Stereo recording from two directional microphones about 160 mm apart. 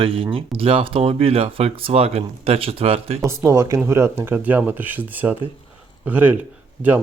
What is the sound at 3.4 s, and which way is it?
Speech, 20° right (ahead or behind).